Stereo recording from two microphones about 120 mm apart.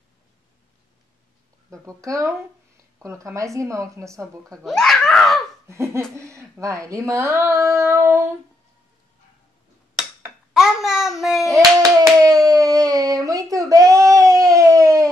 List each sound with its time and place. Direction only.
1.7 s a woman's voice: 25° right (ahead or behind)
4.6 s giggle: 5° left (ahead or behind)
5.7 s laughter: 25° right (ahead or behind)
6.1 s speech: 25° right (ahead or behind)
10.5 s a sound: 5° right (ahead or behind)
11.5 s hands: 30° right (ahead or behind)